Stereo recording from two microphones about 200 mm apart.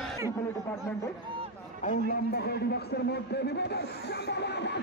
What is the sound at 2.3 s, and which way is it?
A man's voice, 55° left (ahead or behind).